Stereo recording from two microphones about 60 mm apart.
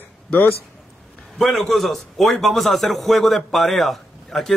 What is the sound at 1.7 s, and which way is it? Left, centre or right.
A man's voice, centre.